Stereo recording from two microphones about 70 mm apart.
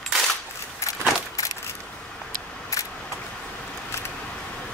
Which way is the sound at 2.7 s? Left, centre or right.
Left.